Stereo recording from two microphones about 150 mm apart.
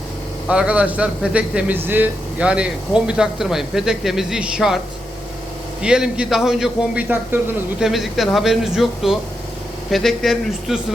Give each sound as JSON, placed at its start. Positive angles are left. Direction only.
{"t": 0.4, "sound": "a man's voice", "side_deg": -5}
{"t": 5.8, "sound": "a man's voice", "side_deg": -5}